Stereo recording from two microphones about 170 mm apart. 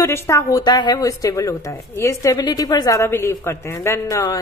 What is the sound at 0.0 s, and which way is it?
A woman's voice, 15° left (ahead or behind).